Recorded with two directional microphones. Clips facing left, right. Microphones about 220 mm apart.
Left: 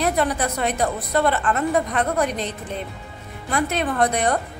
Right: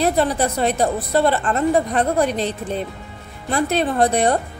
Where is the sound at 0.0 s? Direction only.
30° right (ahead or behind).